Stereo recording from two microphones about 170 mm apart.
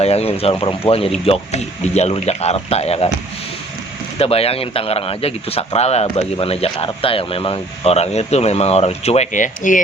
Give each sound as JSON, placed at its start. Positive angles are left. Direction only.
{"t": 0.0, "sound": "speech", "side_deg": 35}
{"t": 4.2, "sound": "speech", "side_deg": 35}